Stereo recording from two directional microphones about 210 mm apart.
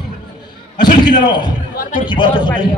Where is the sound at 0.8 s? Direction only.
20° left (ahead or behind).